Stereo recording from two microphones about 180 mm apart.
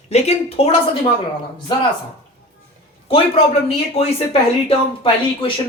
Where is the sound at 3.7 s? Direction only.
35° left (ahead or behind).